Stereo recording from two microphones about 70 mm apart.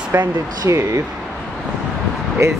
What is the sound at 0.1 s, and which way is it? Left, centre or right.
Speech, right.